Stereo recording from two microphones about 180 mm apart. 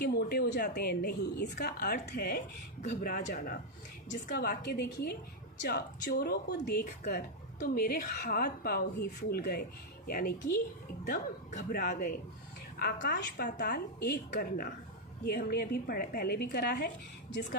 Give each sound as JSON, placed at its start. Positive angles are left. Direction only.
{"t": 0.0, "sound": "speech", "side_deg": 60}
{"t": 2.8, "sound": "speech", "side_deg": 45}
{"t": 12.8, "sound": "speech", "side_deg": 65}